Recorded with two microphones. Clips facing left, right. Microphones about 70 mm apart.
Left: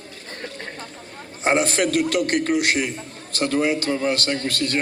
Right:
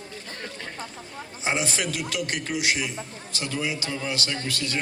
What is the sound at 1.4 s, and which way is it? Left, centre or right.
A man's voice, left.